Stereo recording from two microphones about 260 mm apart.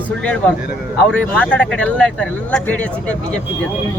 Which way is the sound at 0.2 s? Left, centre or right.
Centre.